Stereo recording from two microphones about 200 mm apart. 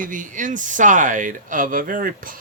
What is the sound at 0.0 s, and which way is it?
Speech, 40° right (ahead or behind).